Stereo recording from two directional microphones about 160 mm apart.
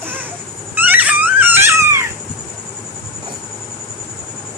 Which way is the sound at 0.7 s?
10° right (ahead or behind).